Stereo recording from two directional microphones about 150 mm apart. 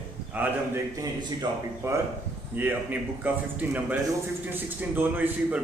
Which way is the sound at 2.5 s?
10° right (ahead or behind).